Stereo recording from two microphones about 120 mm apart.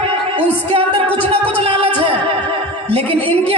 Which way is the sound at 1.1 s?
15° left (ahead or behind).